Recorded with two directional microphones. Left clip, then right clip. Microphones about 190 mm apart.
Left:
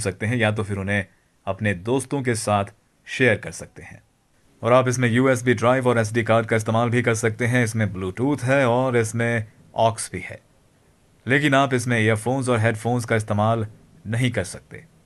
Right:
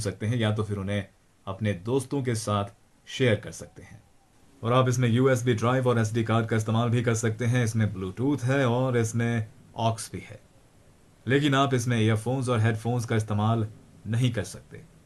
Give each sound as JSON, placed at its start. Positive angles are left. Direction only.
{"t": 0.0, "sound": "speech", "side_deg": 45}